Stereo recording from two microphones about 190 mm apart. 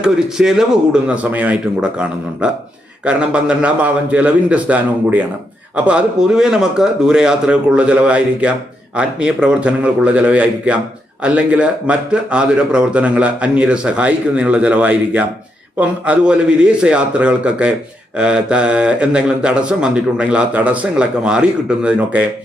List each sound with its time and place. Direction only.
0.0 s a man's voice: 5° right (ahead or behind)